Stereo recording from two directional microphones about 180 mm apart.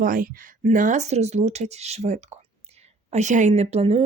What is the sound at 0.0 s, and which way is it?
Speech, 50° right (ahead or behind).